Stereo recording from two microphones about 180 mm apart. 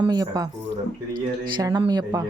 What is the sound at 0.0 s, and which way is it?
Speech, 20° right (ahead or behind).